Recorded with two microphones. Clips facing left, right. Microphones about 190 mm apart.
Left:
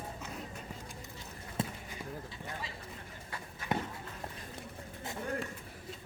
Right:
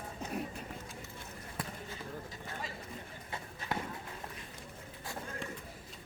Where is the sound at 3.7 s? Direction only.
20° left (ahead or behind).